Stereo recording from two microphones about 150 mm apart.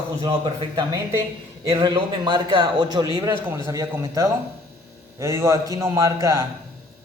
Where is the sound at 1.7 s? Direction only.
30° right (ahead or behind).